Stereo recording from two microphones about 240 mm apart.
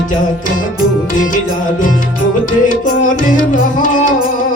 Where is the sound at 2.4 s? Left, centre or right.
Left.